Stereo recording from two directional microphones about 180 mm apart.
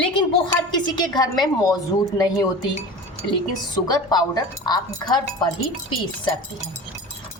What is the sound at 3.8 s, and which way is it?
A woman's voice, 20° left (ahead or behind).